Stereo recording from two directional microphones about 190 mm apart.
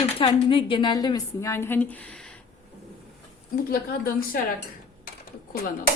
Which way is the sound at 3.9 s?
50° left (ahead or behind).